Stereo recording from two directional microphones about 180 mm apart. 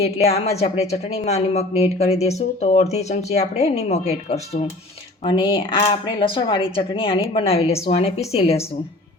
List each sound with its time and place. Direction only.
0.0 s a woman's voice: 35° left (ahead or behind)